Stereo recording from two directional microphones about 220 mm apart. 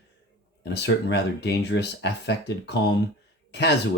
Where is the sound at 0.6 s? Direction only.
50° left (ahead or behind).